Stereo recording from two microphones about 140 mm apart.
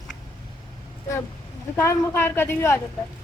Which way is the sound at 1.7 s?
20° left (ahead or behind).